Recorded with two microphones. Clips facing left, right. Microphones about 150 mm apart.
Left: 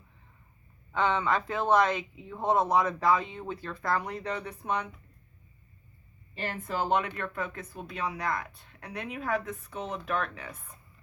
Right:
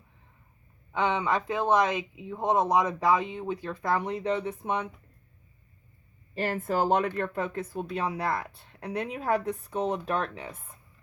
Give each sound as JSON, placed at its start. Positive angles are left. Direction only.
{"t": 0.9, "sound": "speech", "side_deg": -15}
{"t": 6.3, "sound": "speech", "side_deg": -40}